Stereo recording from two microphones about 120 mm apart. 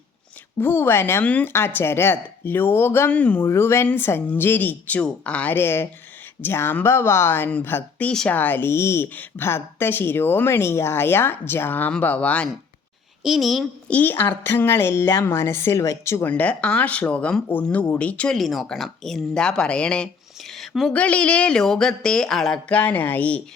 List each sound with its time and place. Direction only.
0.6 s speech: 15° left (ahead or behind)
13.2 s a woman's voice: centre (ahead or behind)
13.9 s a woman's voice: 15° left (ahead or behind)
16.3 s speech: 10° left (ahead or behind)
20.6 s a sound: centre (ahead or behind)
20.9 s speech: 10° left (ahead or behind)